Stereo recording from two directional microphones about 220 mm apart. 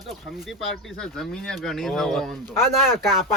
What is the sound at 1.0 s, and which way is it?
A man's voice, centre (ahead or behind).